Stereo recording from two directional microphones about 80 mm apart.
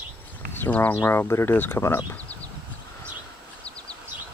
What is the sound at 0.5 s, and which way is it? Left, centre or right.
Speech, left.